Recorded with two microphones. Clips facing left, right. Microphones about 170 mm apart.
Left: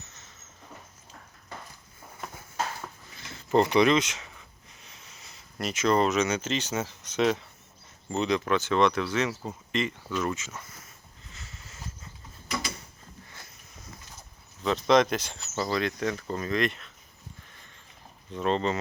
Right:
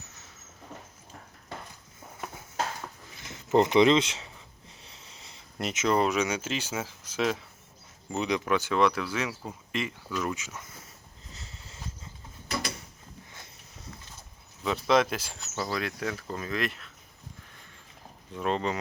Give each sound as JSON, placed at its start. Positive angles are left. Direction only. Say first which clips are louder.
{"t": 3.2, "sound": "speech", "louder": "even", "side_deg": -20}
{"t": 11.3, "sound": "a sound", "louder": "right 1 dB", "side_deg": -35}
{"t": 14.6, "sound": "speech", "louder": "left 2 dB", "side_deg": -5}
{"t": 18.3, "sound": "speech", "louder": "left 2 dB", "side_deg": -10}